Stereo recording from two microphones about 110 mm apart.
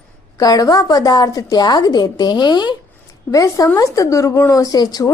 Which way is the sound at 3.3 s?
30° left (ahead or behind).